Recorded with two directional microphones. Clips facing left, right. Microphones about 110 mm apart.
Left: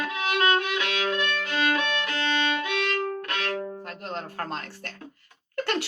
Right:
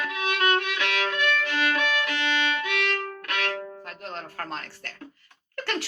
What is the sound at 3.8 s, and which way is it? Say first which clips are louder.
Music: left 3 dB; 35° left (ahead or behind).